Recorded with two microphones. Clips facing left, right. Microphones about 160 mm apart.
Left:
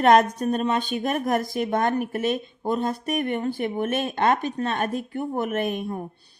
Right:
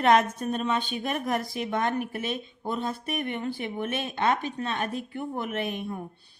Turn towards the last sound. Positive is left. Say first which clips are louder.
# left 5 dB
turn(degrees=45)  # may be behind; listen again after turning